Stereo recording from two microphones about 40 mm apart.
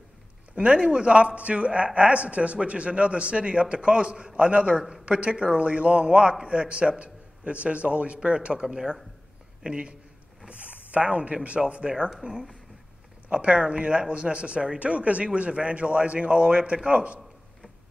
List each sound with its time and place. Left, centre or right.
0.7 s a man's voice: right
8.6 s speech: centre
11.9 s speech: centre
13.3 s a man's voice: right